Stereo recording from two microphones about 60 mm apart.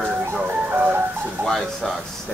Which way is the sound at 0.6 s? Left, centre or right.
Right.